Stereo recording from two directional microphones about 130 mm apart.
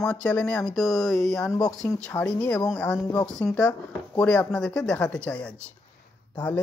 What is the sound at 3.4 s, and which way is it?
Speech, 20° left (ahead or behind).